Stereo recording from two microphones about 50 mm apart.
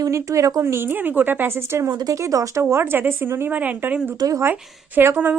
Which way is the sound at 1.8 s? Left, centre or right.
Right.